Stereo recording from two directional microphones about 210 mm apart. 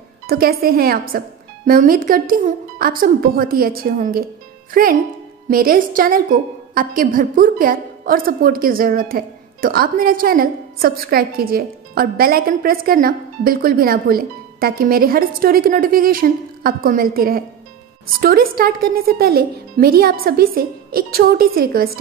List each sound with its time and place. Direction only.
0.3 s a woman's voice: 45° right (ahead or behind)